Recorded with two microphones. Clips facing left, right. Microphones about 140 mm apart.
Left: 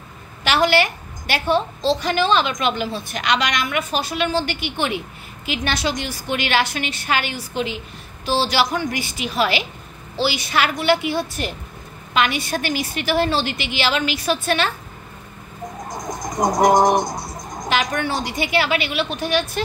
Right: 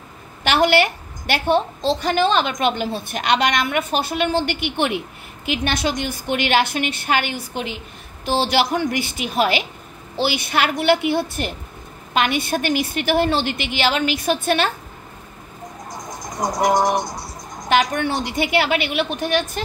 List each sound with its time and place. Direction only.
0.4 s a woman's voice: 55° right (ahead or behind)
15.9 s speech: 45° left (ahead or behind)
18.0 s a woman's voice: 55° right (ahead or behind)